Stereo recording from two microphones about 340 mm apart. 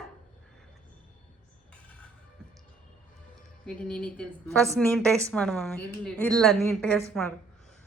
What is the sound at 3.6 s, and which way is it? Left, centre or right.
A woman's voice, centre.